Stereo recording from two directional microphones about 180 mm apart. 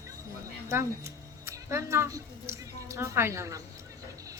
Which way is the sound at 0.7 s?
15° right (ahead or behind).